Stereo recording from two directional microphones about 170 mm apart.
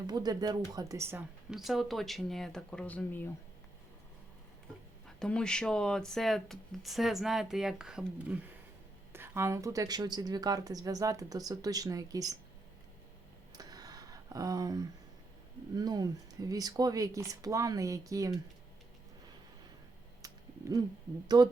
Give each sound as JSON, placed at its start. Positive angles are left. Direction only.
{"t": 0.1, "sound": "speech", "side_deg": -25}
{"t": 1.5, "sound": "speech", "side_deg": 0}
{"t": 5.0, "sound": "speech", "side_deg": 5}
{"t": 9.1, "sound": "speech", "side_deg": -15}
{"t": 13.5, "sound": "a sound", "side_deg": -20}
{"t": 15.7, "sound": "speech", "side_deg": -25}
{"t": 20.2, "sound": "a sound", "side_deg": -20}
{"t": 21.3, "sound": "speech", "side_deg": -25}